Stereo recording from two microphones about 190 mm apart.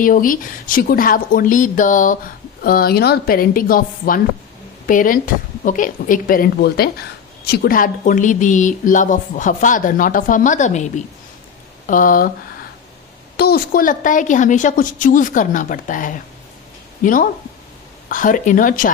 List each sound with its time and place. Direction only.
0.0 s speech: 45° left (ahead or behind)
13.3 s speech: 55° left (ahead or behind)